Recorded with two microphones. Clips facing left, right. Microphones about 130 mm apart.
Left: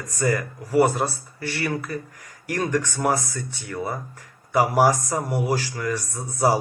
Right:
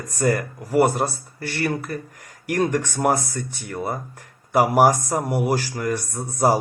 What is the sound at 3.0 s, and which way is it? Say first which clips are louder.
Speech: right 2 dB; 50° right (ahead or behind).